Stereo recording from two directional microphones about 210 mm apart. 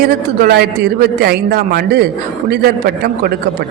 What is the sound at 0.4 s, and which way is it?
A woman's voice, 50° right (ahead or behind).